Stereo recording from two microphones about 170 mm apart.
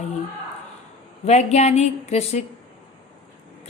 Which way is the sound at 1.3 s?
40° left (ahead or behind).